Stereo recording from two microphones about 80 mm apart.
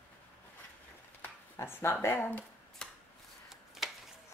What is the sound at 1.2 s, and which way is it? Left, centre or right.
Speech, left.